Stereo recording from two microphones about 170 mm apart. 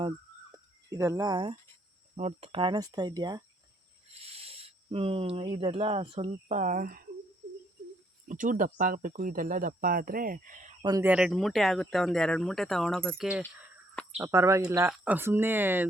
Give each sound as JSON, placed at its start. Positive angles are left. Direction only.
{"t": 0.9, "sound": "speech", "side_deg": -15}
{"t": 2.1, "sound": "speech", "side_deg": -40}
{"t": 4.1, "sound": "speech", "side_deg": -35}
{"t": 8.3, "sound": "speech", "side_deg": -50}
{"t": 11.0, "sound": "speech", "side_deg": -5}
{"t": 14.2, "sound": "speech", "side_deg": -15}